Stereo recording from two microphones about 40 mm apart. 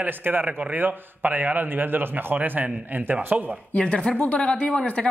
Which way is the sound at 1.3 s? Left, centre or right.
Right.